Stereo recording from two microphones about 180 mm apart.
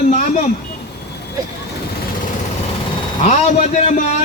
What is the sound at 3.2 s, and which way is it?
A man's voice, 40° left (ahead or behind).